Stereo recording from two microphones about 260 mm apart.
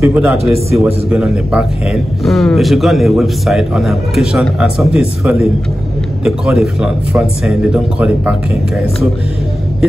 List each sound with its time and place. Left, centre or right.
0.0 s a man's voice: centre
0.4 s a man's voice: right
1.1 s a man's voice: centre
6.2 s a man's voice: centre